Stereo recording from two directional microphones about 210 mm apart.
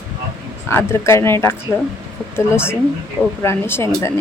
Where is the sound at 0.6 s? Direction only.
10° left (ahead or behind).